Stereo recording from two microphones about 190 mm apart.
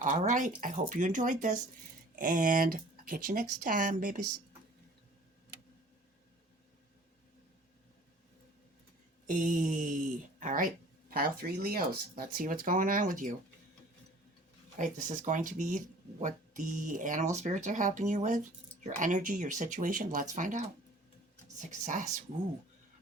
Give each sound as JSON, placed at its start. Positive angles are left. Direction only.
{"t": 0.0, "sound": "speech", "side_deg": -40}
{"t": 9.2, "sound": "speech", "side_deg": -45}
{"t": 14.8, "sound": "speech", "side_deg": -40}